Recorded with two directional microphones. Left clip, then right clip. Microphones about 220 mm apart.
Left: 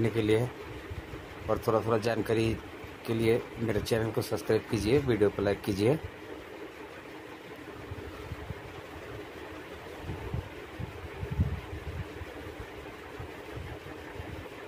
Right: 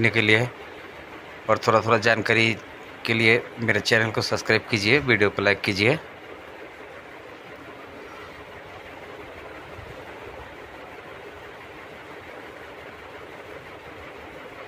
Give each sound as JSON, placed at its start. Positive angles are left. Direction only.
{"t": 0.0, "sound": "speech", "side_deg": -5}
{"t": 1.5, "sound": "a man's voice", "side_deg": -20}
{"t": 1.9, "sound": "speech", "side_deg": -5}